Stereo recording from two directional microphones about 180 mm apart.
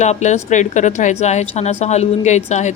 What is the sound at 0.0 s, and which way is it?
A woman's voice, 40° left (ahead or behind).